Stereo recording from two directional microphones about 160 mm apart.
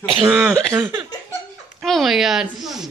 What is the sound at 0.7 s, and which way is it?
Speech, 20° right (ahead or behind).